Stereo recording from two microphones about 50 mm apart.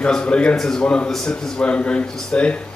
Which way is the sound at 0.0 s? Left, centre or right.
Centre.